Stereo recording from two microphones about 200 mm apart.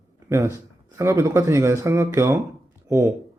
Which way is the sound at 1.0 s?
15° right (ahead or behind).